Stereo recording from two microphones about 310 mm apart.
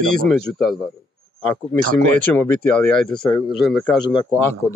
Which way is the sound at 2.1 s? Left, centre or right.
Centre.